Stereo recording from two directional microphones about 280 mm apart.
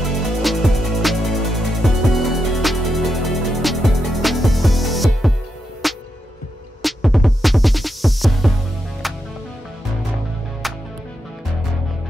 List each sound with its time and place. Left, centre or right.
0.4 s music: centre
10.6 s music: centre